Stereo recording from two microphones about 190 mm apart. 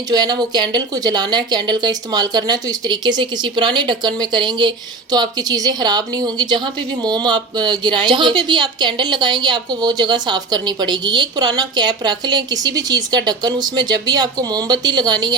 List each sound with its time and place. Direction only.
0.1 s a woman's voice: 20° right (ahead or behind)